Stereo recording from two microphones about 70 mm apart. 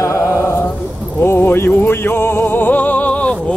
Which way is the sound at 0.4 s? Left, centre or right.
Left.